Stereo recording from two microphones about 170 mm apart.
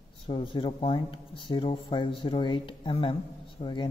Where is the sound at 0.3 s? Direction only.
30° left (ahead or behind).